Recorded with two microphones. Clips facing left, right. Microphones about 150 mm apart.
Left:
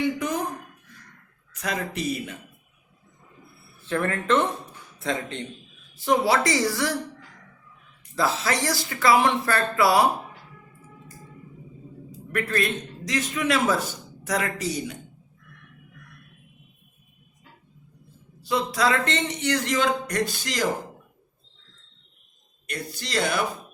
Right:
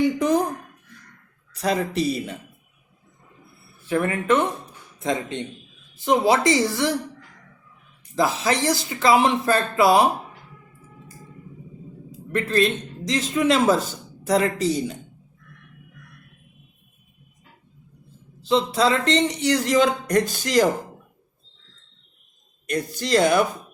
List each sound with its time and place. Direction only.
0.2 s a sound: 35° right (ahead or behind)
1.5 s a man's voice: 35° right (ahead or behind)
3.8 s speech: 10° right (ahead or behind)
8.1 s speech: 20° right (ahead or behind)
12.3 s speech: 25° right (ahead or behind)
18.4 s a man's voice: 25° right (ahead or behind); by 20.7 s 45° right (ahead or behind)
22.6 s speech: 40° right (ahead or behind)